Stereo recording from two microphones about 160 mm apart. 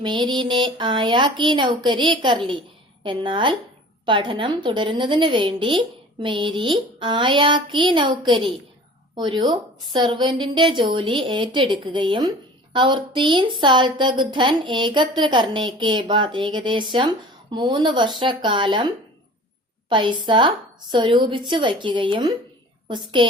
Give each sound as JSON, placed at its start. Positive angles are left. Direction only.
{"t": 0.0, "sound": "a woman's voice", "side_deg": -30}
{"t": 19.9, "sound": "a woman's voice", "side_deg": -30}